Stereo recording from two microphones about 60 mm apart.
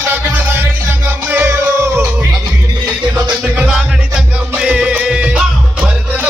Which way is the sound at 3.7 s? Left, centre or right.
Centre.